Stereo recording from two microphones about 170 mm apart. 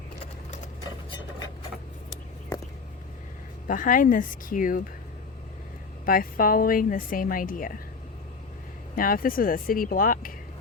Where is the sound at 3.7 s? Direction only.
50° left (ahead or behind).